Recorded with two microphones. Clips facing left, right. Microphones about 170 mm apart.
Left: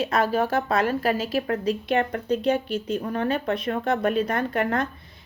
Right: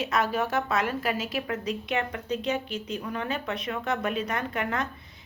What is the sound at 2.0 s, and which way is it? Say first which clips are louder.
Speech: left 6 dB; 50° left (ahead or behind).